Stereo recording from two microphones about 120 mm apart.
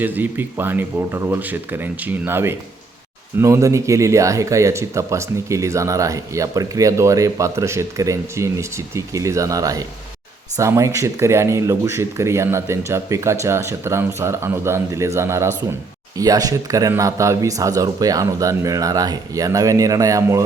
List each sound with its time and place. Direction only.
0.0 s speech: 15° right (ahead or behind)